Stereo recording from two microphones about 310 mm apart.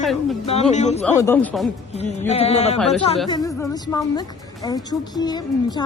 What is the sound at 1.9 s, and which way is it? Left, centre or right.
A woman's voice, left.